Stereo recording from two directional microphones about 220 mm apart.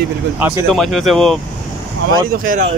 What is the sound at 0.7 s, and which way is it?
Speech, centre (ahead or behind).